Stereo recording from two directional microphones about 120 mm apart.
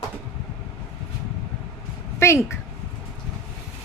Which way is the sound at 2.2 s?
20° left (ahead or behind).